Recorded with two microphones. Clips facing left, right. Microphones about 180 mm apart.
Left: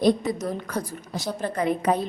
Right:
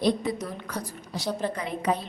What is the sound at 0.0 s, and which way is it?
A woman's voice, 45° left (ahead or behind).